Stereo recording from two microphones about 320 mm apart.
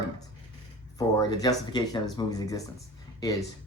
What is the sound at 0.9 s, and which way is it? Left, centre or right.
Speech, centre.